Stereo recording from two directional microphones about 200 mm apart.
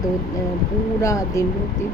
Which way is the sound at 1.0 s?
15° left (ahead or behind).